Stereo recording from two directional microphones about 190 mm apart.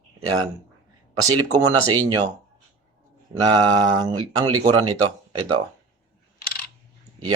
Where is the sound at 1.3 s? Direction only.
20° right (ahead or behind).